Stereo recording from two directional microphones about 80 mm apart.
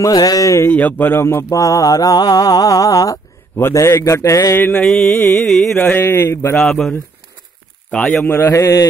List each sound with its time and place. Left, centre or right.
0.0 s mantra: left
0.7 s speech: left
1.5 s mantra: left
3.5 s a man's voice: left
4.6 s speech: left
4.8 s carnatic music: centre
5.8 s speech: left
6.5 s speech: centre
8.2 s a man's voice: left